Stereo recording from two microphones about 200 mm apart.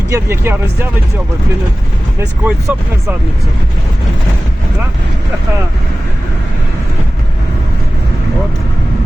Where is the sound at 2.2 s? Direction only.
10° right (ahead or behind).